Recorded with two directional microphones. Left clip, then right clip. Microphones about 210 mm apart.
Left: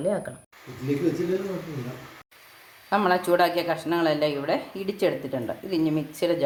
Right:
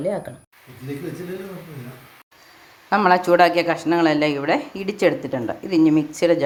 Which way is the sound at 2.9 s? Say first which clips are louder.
Right 6 dB; 20° right (ahead or behind).